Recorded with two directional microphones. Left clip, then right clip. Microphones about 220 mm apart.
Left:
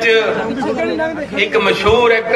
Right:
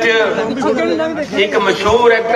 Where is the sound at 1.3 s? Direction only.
35° left (ahead or behind).